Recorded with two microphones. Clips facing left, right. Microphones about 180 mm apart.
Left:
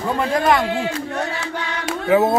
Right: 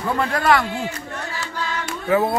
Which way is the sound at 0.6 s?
85° left.